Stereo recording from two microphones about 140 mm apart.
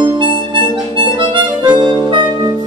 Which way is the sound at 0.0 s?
35° right (ahead or behind).